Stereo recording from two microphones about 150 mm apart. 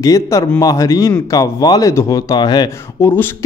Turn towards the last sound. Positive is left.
turn(degrees=30)  # may be behind; listen again after turning